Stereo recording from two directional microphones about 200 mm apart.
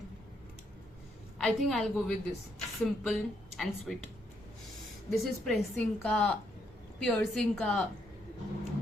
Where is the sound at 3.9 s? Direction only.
Centre (ahead or behind).